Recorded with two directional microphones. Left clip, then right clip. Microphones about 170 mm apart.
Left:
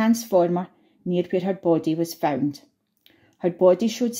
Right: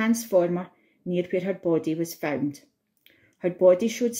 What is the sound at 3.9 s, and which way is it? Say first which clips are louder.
Speech: even; 20° left (ahead or behind).